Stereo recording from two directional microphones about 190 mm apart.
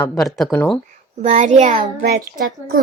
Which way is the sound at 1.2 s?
35° right (ahead or behind).